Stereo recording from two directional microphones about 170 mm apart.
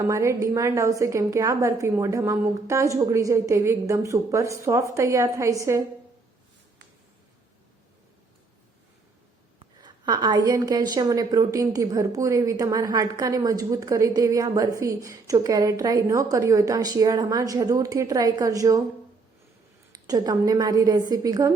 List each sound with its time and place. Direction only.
0.0 s a woman's voice: 20° right (ahead or behind)
9.6 s a woman's voice: 25° right (ahead or behind)
19.9 s a woman's voice: 20° right (ahead or behind)